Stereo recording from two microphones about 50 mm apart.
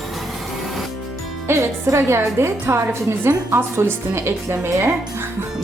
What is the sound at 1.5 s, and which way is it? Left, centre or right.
A woman's voice, right.